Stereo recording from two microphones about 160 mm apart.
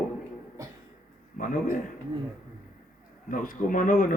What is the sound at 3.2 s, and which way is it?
Speech, 60° left (ahead or behind).